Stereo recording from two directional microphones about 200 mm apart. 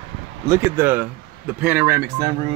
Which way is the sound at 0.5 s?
10° right (ahead or behind).